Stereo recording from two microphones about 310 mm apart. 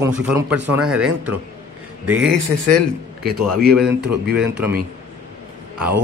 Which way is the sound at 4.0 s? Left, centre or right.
Right.